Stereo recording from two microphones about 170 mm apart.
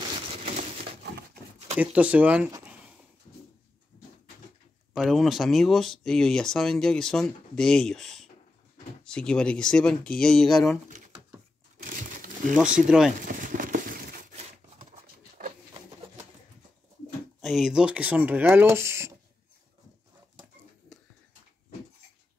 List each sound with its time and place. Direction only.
0.3 s crumpling: 40° right (ahead or behind)
1.8 s speech: 10° right (ahead or behind)
4.9 s speech: centre (ahead or behind)
11.8 s a sound: 55° right (ahead or behind)
12.7 s speech: 5° right (ahead or behind)
13.2 s a sound: 50° right (ahead or behind)
17.4 s speech: centre (ahead or behind)